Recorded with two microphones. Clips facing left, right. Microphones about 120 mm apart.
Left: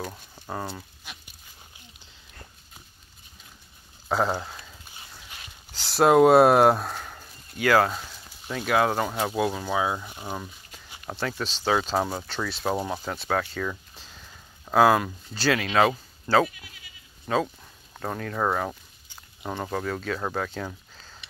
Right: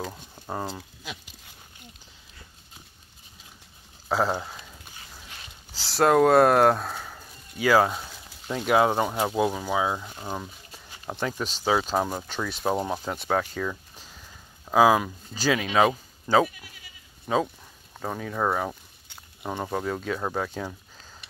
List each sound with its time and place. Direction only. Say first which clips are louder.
0.0 s speech: right 1 dB; 10° right (ahead or behind)
4.1 s speech: even; centre (ahead or behind)
5.7 s a sound: left 1 dB; centre (ahead or behind)
6.0 s speech: left 2 dB; 15° left (ahead or behind); by 9.8 s 10° right (ahead or behind)
9.8 s speech: even; 5° left (ahead or behind)
11.1 s speech: right 1 dB; 15° right (ahead or behind)